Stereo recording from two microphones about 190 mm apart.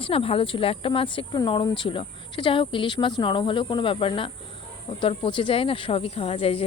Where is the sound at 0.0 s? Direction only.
30° left (ahead or behind).